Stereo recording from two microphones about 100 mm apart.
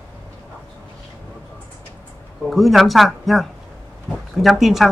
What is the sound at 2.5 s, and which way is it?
Speech, centre (ahead or behind).